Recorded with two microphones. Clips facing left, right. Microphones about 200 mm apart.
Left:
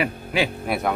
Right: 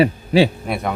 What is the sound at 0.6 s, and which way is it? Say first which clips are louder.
Speech: even; centre (ahead or behind).